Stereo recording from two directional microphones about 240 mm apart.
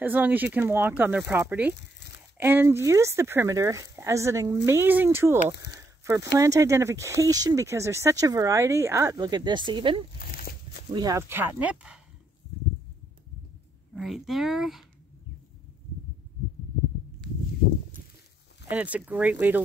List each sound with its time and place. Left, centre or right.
0.0 s speech: centre
1.8 s a sound: left
2.3 s speech: centre
5.7 s a sound: centre
6.3 s speech: centre
10.1 s a sound: left
10.9 s speech: centre
13.9 s speech: centre
18.7 s speech: centre